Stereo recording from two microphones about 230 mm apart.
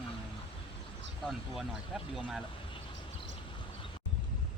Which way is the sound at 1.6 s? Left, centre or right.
Centre.